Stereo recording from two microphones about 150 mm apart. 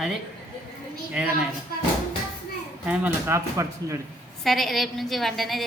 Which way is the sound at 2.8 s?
10° right (ahead or behind).